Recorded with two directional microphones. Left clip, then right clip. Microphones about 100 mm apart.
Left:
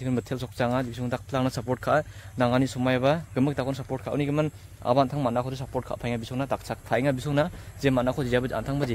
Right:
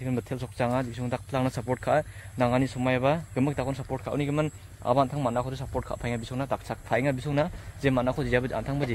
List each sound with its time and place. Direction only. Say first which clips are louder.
0.0 s speech: left 2 dB; 35° left (ahead or behind)